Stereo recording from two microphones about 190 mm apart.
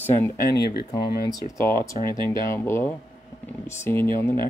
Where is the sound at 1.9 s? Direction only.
25° right (ahead or behind).